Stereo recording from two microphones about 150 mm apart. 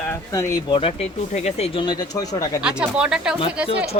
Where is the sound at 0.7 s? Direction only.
45° left (ahead or behind).